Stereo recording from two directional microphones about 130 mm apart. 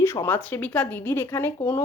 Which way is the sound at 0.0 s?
15° left (ahead or behind).